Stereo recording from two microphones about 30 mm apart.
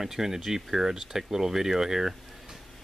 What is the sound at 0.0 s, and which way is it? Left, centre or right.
Speech, centre.